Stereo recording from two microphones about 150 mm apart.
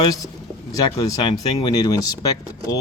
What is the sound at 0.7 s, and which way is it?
Speech, 25° left (ahead or behind).